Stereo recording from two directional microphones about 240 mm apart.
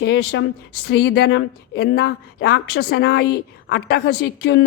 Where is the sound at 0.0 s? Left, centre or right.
Left.